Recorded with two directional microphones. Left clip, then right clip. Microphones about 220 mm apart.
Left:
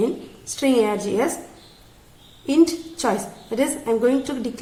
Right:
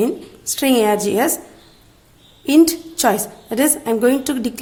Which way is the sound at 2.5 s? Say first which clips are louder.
Right 5 dB; 50° right (ahead or behind).